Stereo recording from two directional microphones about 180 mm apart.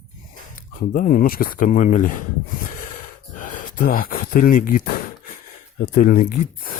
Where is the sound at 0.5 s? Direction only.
50° left (ahead or behind).